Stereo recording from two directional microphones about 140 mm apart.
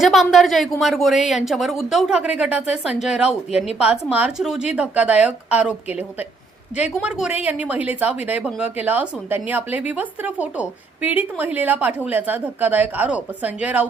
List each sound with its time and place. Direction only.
0.0 s a woman's voice: centre (ahead or behind)